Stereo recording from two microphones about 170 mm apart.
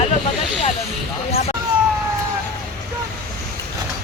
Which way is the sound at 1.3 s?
35° left (ahead or behind).